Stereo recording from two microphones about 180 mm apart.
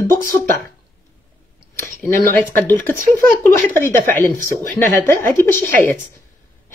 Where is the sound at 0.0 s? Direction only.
15° left (ahead or behind).